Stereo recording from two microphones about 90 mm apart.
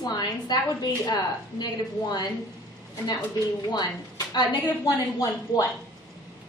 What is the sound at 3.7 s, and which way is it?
A woman's voice, 50° left (ahead or behind).